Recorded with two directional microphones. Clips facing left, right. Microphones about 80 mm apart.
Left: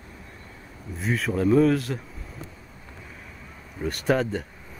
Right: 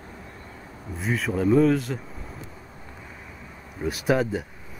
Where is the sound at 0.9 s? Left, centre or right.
Centre.